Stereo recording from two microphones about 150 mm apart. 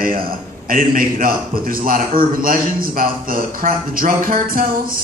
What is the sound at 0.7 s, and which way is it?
A man's voice, 65° right (ahead or behind).